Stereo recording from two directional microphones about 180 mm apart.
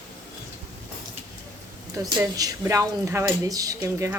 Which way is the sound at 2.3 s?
20° right (ahead or behind).